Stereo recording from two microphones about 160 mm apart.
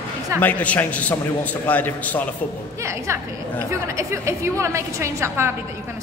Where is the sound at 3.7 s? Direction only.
20° right (ahead or behind).